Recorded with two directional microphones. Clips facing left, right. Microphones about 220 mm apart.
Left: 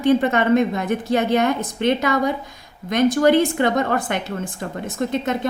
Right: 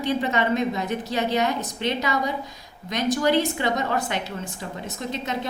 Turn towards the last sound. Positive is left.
turn(degrees=50)  # may be behind; listen again after turning